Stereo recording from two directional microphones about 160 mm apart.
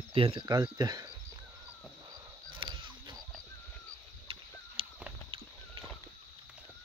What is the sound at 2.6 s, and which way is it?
Wild animals, 30° right (ahead or behind).